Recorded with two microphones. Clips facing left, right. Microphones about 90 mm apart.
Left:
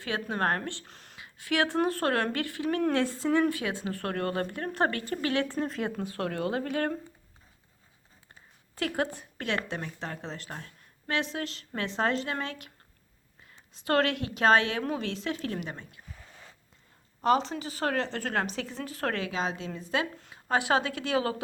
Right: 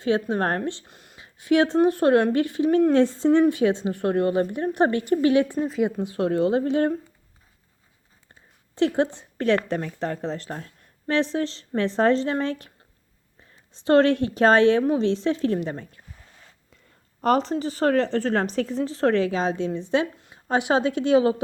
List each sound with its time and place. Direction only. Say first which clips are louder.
0.0 s speech: right 7 dB; 25° right (ahead or behind)
0.9 s a sound: right 1 dB; 10° right (ahead or behind)
1.2 s speech: right 8 dB; 20° right (ahead or behind)
5.6 s speech: right 8 dB; 5° right (ahead or behind)
6.0 s speech: right 9 dB; 20° right (ahead or behind)
8.7 s speech: right 9 dB; 25° right (ahead or behind)
9.4 s speech: right 10 dB; 40° right (ahead or behind)
13.7 s speech: right 9 dB; 30° right (ahead or behind)
17.2 s speech: right 4 dB; 45° right (ahead or behind); by 21.4 s 25° right (ahead or behind)